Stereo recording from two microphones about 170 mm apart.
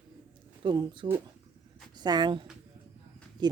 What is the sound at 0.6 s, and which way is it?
Speech, 30° right (ahead or behind).